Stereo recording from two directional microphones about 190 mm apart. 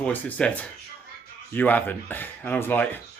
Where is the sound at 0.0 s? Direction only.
10° left (ahead or behind).